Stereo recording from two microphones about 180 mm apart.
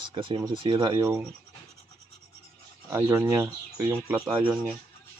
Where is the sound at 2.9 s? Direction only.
15° right (ahead or behind).